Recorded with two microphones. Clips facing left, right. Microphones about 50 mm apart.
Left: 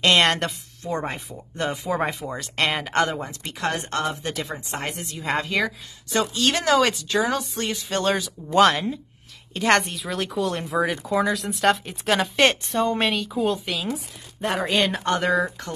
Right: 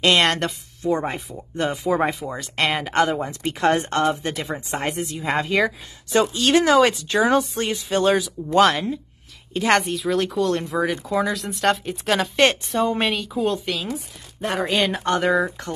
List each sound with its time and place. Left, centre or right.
0.0 s speech: centre
3.3 s speech: right
3.9 s speech: centre
7.1 s speech: right
7.7 s speech: centre